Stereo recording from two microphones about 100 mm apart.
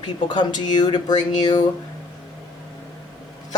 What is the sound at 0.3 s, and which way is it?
Speech, 45° left (ahead or behind).